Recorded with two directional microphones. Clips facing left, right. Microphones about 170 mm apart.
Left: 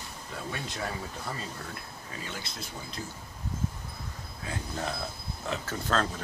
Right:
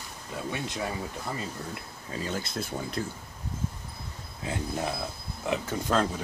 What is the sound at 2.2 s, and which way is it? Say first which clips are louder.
Speech: right 10 dB; 45° right (ahead or behind).